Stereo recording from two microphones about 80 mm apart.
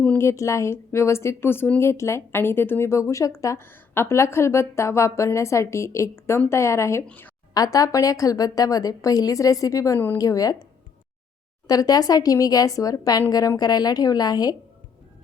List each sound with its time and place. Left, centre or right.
0.2 s a woman's voice: left
7.5 s speech: left
11.7 s speech: left